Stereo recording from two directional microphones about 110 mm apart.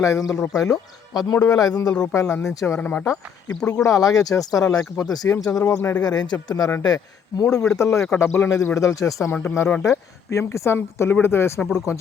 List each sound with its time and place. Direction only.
0.0 s speech: 30° left (ahead or behind)
2.1 s speech: 25° left (ahead or behind)
2.8 s speech: 15° left (ahead or behind)
3.7 s speech: 30° left (ahead or behind)
7.5 s speech: 10° left (ahead or behind)
7.8 s speech: 25° left (ahead or behind)
9.3 s speech: 20° left (ahead or behind)